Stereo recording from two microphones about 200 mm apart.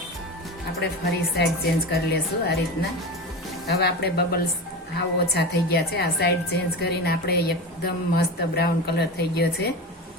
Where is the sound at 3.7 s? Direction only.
55° left (ahead or behind).